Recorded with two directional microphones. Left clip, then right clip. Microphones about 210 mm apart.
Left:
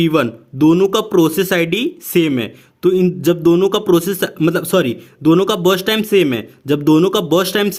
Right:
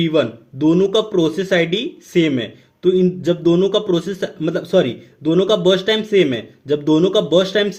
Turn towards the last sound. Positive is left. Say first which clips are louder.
# even
turn(degrees=50)  # may be behind; listen again after turning